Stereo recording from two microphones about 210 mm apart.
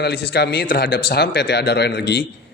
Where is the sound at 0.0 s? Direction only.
50° left (ahead or behind).